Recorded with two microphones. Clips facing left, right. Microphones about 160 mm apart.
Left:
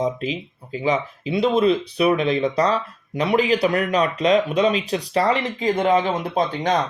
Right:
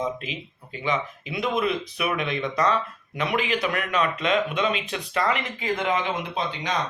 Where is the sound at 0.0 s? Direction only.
35° left (ahead or behind).